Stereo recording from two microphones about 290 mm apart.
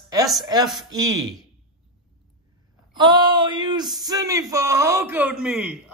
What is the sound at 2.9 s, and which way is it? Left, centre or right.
A man's voice, centre.